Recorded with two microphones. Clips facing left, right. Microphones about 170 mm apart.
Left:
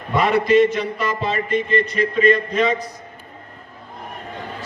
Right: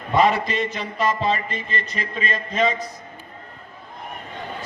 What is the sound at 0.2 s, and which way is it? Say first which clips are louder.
Speech: left 5 dB; 55° left (ahead or behind).